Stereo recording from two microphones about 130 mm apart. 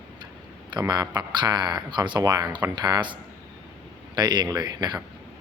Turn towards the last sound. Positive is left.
turn(degrees=-30)  # may be behind; listen again after turning